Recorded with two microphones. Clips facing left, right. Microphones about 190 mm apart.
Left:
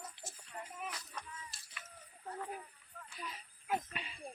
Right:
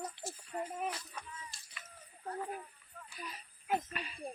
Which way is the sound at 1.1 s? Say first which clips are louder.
Right 1 dB; centre (ahead or behind).